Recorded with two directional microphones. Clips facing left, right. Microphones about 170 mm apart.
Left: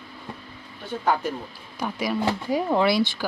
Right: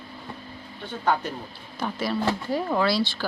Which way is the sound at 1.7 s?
10° left (ahead or behind).